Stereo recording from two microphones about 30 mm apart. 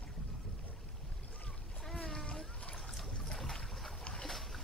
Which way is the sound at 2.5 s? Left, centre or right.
Left.